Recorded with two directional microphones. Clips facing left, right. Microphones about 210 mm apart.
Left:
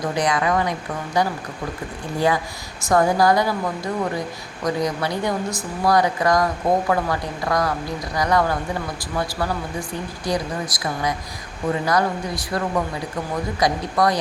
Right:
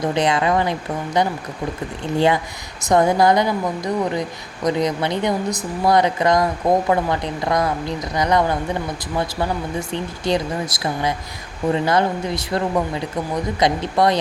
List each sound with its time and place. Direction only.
0.1 s speech: 25° right (ahead or behind)
4.6 s speech: 20° right (ahead or behind)